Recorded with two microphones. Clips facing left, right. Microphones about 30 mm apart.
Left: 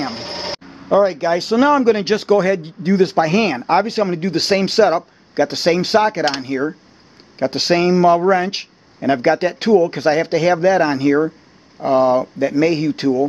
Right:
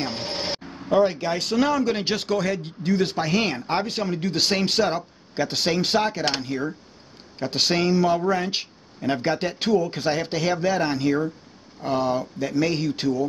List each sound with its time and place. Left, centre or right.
0.0 s vehicle: centre
1.6 s speech: left
3.1 s speech: left; by 13.1 s centre